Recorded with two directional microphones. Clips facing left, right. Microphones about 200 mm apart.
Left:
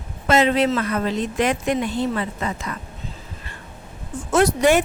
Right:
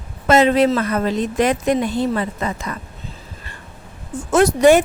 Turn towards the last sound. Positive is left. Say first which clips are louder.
# right 4 dB
turn(degrees=-45)  # may be behind; listen again after turning